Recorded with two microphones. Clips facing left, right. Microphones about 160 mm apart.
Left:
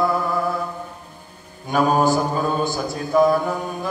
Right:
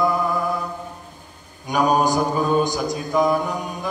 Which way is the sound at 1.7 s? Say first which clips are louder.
Left 1 dB; 15° right (ahead or behind).